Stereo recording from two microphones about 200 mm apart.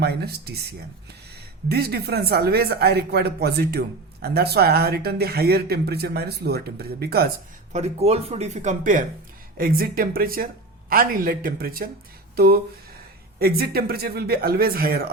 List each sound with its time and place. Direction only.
0.0 s speech: 55° right (ahead or behind)
1.7 s speech: 50° right (ahead or behind)
7.7 s speech: 30° right (ahead or behind); by 11.9 s 50° right (ahead or behind)
13.4 s speech: 50° right (ahead or behind)